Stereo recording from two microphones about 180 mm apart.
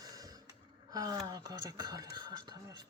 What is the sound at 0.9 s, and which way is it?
Speech, 20° right (ahead or behind).